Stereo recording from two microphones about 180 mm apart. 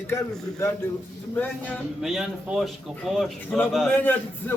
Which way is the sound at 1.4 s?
10° left (ahead or behind).